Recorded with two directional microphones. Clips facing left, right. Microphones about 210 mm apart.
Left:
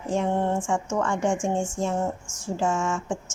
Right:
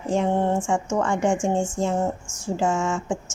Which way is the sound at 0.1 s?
30° right (ahead or behind).